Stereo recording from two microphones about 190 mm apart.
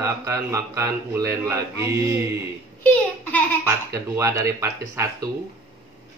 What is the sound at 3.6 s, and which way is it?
Speech, 15° right (ahead or behind).